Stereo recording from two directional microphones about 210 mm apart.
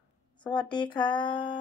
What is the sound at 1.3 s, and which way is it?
Speech, 20° left (ahead or behind).